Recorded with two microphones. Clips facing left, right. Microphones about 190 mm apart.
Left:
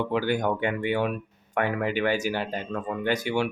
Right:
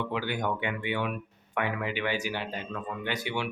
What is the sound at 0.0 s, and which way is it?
Speech, 45° left (ahead or behind).